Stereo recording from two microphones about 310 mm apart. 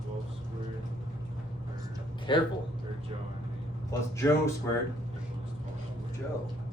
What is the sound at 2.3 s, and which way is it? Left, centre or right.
Speech, centre.